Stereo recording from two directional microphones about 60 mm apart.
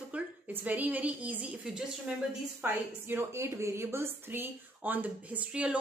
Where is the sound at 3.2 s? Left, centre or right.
Right.